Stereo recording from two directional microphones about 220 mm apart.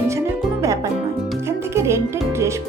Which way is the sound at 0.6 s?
15° right (ahead or behind).